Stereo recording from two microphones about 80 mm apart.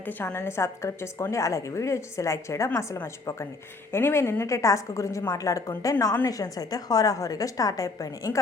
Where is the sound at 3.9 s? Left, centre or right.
Left.